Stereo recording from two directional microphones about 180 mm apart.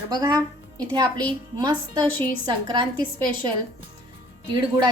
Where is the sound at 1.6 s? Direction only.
25° right (ahead or behind).